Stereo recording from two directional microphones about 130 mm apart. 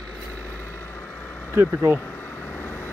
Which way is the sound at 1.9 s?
15° left (ahead or behind).